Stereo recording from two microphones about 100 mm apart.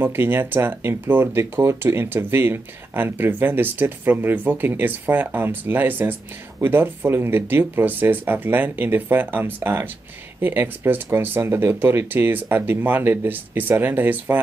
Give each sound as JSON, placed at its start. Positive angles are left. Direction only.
{"t": 0.0, "sound": "speech", "side_deg": -20}